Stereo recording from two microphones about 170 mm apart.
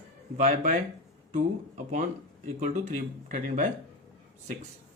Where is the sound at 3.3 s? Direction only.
55° right (ahead or behind).